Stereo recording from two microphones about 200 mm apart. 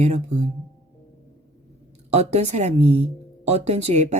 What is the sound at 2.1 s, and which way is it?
A woman's voice, 35° right (ahead or behind).